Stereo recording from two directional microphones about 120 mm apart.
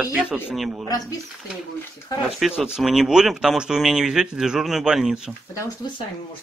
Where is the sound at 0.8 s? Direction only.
30° left (ahead or behind).